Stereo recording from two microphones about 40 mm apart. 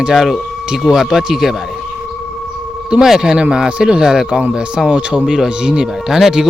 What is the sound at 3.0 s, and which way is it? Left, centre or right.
A man's voice, centre.